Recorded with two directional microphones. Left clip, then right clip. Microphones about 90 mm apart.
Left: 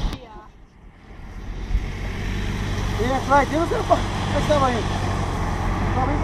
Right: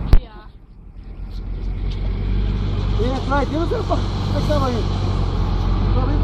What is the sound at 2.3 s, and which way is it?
Vehicle, 20° left (ahead or behind).